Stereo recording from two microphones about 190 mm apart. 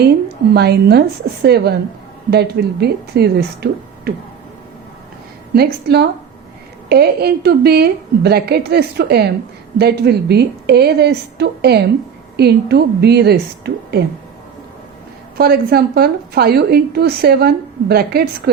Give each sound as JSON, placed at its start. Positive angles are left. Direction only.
{"t": 0.5, "sound": "a woman's voice", "side_deg": -60}
{"t": 5.5, "sound": "a woman's voice", "side_deg": -55}
{"t": 15.4, "sound": "a woman's voice", "side_deg": -55}